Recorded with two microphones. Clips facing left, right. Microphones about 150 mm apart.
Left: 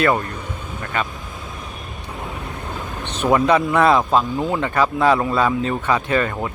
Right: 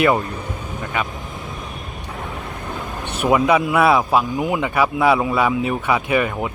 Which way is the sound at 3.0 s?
10° right (ahead or behind).